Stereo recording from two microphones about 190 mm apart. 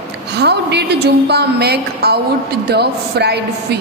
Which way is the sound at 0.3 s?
60° right (ahead or behind).